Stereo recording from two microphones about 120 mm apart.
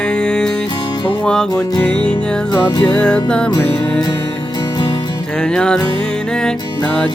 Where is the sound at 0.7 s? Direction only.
35° left (ahead or behind).